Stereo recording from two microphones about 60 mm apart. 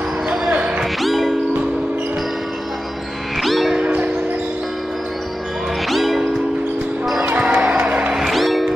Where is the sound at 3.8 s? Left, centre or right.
Centre.